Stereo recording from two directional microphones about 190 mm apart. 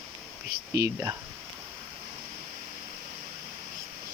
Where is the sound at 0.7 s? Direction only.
15° right (ahead or behind).